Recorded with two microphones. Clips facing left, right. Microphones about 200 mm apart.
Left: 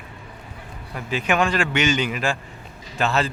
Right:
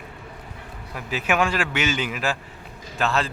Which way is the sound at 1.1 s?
5° right (ahead or behind).